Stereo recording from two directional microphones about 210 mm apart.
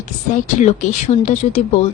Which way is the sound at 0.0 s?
35° left (ahead or behind).